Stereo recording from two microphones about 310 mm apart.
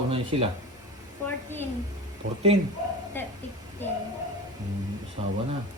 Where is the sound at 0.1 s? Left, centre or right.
Centre.